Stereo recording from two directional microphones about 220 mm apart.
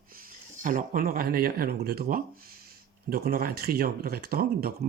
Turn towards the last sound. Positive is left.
turn(degrees=-45)  # may be behind; listen again after turning